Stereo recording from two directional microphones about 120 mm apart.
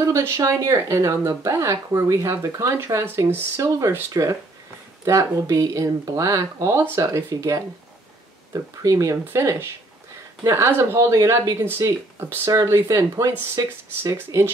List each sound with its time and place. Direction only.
0.0 s speech: 25° right (ahead or behind)